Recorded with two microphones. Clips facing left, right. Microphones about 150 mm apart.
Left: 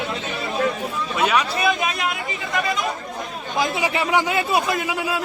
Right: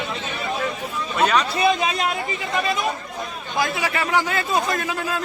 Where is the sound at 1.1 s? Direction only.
5° left (ahead or behind).